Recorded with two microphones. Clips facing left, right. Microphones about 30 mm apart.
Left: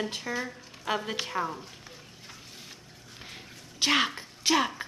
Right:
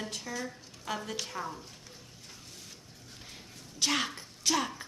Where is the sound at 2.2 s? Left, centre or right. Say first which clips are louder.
Left 4 dB; left.